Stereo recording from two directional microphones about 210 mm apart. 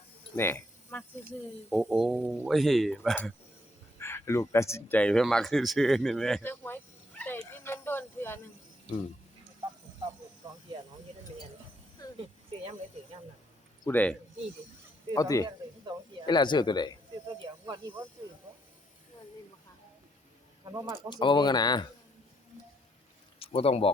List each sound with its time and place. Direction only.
0.3 s speech: 10° left (ahead or behind)
1.7 s speech: centre (ahead or behind)
4.0 s speech: 10° left (ahead or behind)
7.2 s dog: 10° left (ahead or behind)
12.0 s a sound: 15° left (ahead or behind)
13.8 s speech: 5° left (ahead or behind)
17.4 s snake: 20° right (ahead or behind)
20.7 s speech: 20° right (ahead or behind)
21.1 s speech: 20° left (ahead or behind)
23.4 s speech: 25° left (ahead or behind)